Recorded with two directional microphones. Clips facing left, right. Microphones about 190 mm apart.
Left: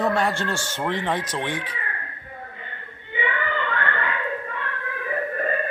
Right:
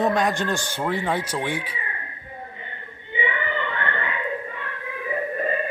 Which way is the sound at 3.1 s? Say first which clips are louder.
Even; 20° right (ahead or behind).